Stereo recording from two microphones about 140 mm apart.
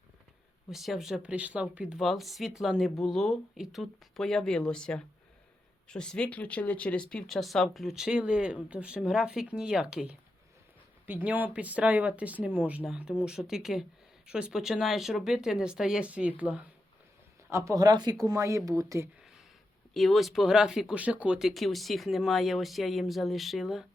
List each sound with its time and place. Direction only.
0.7 s speech: centre (ahead or behind)
17.5 s speech: 25° right (ahead or behind)
19.9 s speech: centre (ahead or behind)